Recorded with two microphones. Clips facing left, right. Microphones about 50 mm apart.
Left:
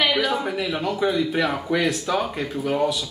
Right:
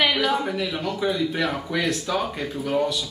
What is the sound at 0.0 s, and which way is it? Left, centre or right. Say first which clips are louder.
Speech: even; centre.